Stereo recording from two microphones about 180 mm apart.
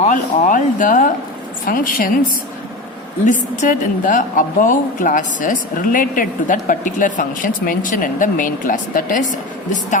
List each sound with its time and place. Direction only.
0.0 s a woman's voice: 45° left (ahead or behind)
3.2 s a woman's voice: 45° left (ahead or behind)